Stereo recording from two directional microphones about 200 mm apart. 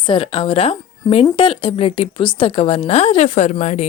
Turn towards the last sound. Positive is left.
turn(degrees=35)  # may be behind; listen again after turning